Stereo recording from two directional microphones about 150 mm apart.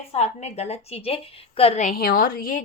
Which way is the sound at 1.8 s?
80° left.